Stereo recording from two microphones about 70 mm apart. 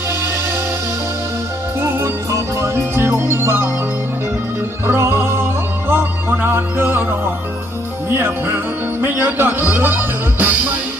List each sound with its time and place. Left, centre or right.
1.8 s music: right
4.9 s music: right
8.1 s music: right